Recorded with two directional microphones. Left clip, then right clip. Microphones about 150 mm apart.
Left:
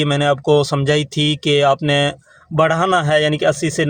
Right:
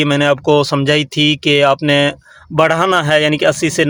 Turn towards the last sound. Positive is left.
turn(degrees=-30)  # may be behind; listen again after turning